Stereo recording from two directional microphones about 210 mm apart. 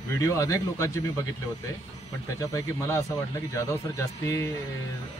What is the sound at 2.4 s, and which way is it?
Speech, 15° left (ahead or behind).